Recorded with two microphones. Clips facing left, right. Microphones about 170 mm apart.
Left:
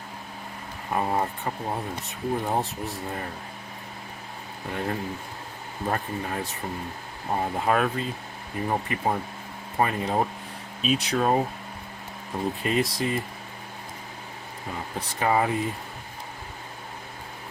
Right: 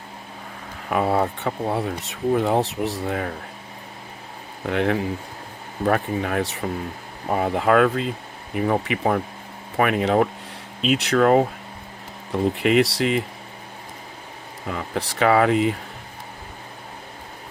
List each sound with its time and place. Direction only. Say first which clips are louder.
0.9 s speech: right 5 dB; 85° right
4.7 s speech: right 8 dB; 80° right
14.7 s speech: right 7 dB; 80° right